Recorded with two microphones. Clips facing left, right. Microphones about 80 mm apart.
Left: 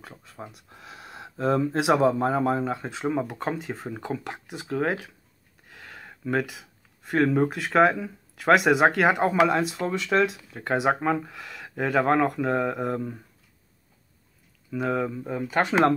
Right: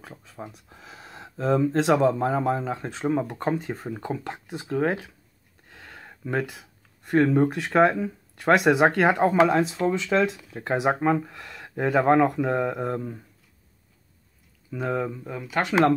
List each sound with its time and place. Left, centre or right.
0.0 s speech: centre
4.6 s speech: centre
5.8 s a sound: centre
6.4 s speech: centre
14.8 s speech: centre
15.4 s speech: left